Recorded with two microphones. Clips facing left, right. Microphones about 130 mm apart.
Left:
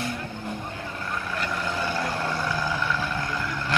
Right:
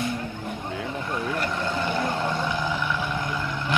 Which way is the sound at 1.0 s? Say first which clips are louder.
Right 2 dB; 20° right (ahead or behind).